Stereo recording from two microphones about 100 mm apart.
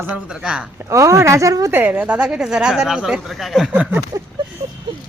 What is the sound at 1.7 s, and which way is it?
Speech, 15° right (ahead or behind).